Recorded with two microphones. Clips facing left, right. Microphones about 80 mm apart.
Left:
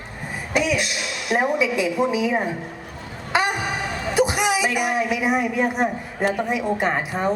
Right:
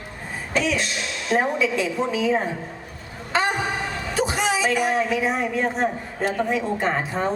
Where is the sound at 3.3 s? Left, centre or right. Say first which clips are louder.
Even; centre.